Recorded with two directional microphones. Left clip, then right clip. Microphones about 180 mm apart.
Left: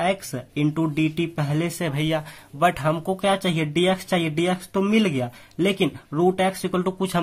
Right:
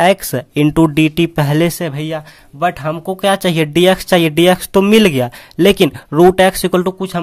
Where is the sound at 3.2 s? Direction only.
35° right (ahead or behind).